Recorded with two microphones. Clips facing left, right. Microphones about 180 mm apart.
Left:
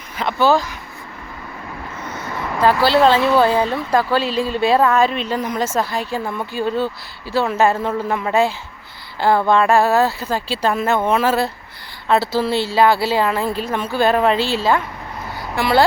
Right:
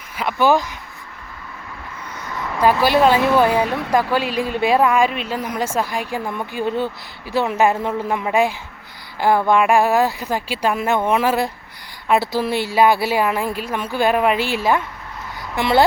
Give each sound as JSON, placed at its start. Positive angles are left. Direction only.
{"t": 0.2, "sound": "a woman's voice", "side_deg": -10}
{"t": 2.6, "sound": "a woman's voice", "side_deg": -15}